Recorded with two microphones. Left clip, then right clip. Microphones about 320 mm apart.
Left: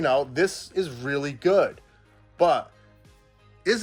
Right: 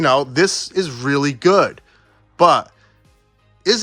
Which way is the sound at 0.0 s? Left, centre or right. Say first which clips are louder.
Right 7 dB; right.